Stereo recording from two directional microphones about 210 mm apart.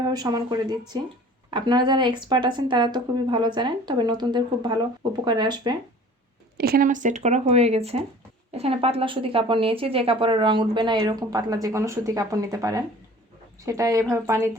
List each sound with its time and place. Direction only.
0.0 s a woman's voice: 20° right (ahead or behind)
6.6 s a woman's voice: 45° right (ahead or behind); by 14.5 s 15° right (ahead or behind)